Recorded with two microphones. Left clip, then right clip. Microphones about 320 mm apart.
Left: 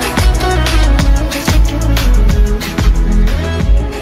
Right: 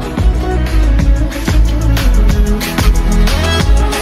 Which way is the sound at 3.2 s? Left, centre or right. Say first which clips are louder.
Right 7 dB; centre.